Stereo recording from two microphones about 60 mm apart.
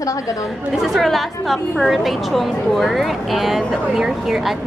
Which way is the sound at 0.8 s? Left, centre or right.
Centre.